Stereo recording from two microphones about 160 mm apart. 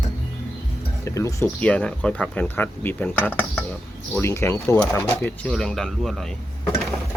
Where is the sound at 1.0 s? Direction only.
20° left (ahead or behind); by 6.4 s centre (ahead or behind).